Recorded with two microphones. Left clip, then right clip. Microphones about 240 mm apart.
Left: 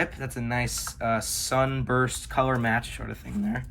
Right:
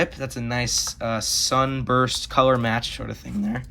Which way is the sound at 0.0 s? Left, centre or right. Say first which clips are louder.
Right 4 dB; centre.